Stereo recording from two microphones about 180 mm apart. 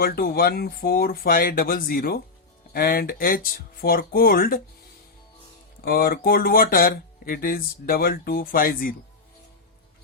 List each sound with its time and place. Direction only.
0.0 s speech: 55° left (ahead or behind)
5.8 s speech: 55° left (ahead or behind)